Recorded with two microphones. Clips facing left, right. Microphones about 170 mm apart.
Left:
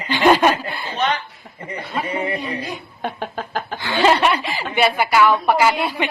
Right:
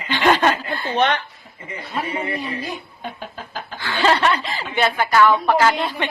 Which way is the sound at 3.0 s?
70° left (ahead or behind).